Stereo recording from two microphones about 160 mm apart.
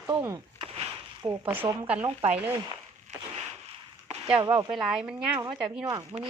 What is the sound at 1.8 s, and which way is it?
Speech, 10° right (ahead or behind).